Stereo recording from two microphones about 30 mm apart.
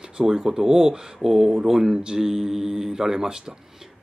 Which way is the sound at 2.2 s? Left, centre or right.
Centre.